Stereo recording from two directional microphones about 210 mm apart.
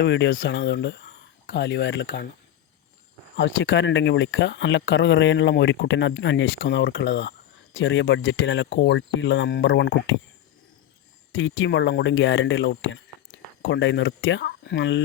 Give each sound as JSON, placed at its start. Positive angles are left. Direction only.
{"t": 0.1, "sound": "speech", "side_deg": 60}
{"t": 3.3, "sound": "speech", "side_deg": 60}
{"t": 11.3, "sound": "speech", "side_deg": 60}